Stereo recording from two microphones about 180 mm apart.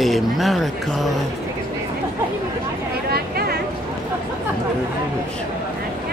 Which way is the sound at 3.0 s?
60° right (ahead or behind).